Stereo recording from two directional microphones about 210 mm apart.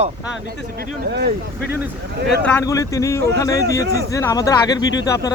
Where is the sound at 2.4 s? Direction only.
10° left (ahead or behind).